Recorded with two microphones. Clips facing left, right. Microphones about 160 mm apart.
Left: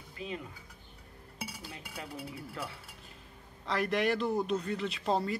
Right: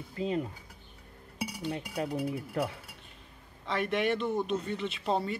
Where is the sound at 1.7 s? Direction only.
40° right (ahead or behind).